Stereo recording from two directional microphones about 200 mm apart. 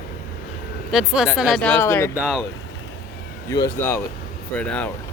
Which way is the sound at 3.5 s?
20° left (ahead or behind).